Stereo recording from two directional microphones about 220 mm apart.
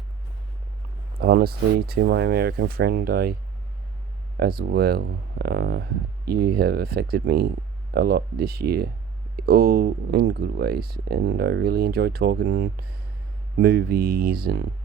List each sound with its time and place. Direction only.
1.2 s speech: 45° right (ahead or behind)
4.4 s speech: 45° right (ahead or behind)